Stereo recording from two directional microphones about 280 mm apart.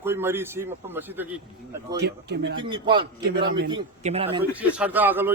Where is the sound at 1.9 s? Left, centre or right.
Right.